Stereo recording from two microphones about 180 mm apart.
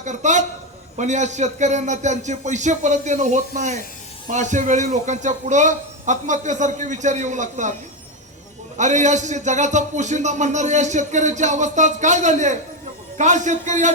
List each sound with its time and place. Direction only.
0.0 s a man's voice: 40° right (ahead or behind)
8.8 s a man's voice: 40° right (ahead or behind)